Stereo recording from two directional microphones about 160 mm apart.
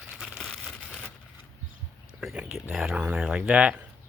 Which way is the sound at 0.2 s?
Centre (ahead or behind).